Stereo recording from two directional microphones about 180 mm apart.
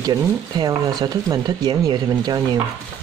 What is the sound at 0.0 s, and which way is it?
Speech, 20° right (ahead or behind).